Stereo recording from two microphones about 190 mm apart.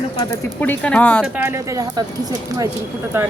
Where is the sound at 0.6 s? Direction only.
5° left (ahead or behind).